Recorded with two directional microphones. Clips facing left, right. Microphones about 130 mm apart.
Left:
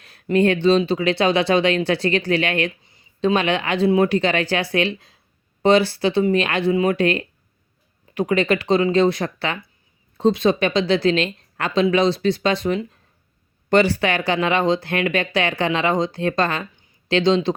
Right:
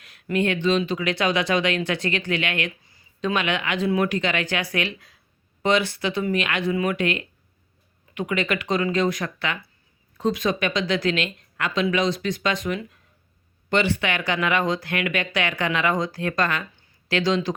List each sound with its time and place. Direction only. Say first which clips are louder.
0.0 s a woman's voice: left 6 dB; 30° left (ahead or behind)
2.8 s a woman's voice: left 7 dB; 20° left (ahead or behind)
16.7 s a sound: left 5 dB; 25° left (ahead or behind)